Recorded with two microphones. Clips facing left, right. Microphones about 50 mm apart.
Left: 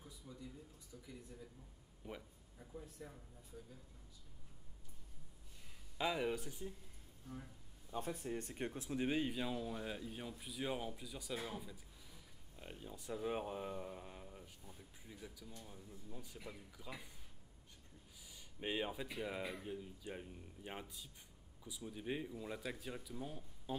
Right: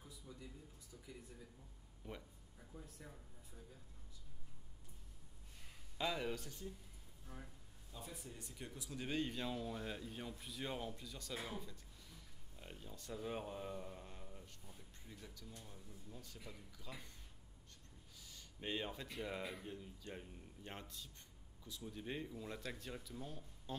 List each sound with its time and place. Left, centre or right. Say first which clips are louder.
0.3 s a sound: left 1 dB; centre
2.0 s speech: left 2 dB; centre
2.6 s speech: left 3 dB; left
5.9 s speech: left 3 dB; centre
7.9 s speech: left 11 dB; left
9.0 s speech: left 3 dB; centre
18.2 s speech: left 3 dB; centre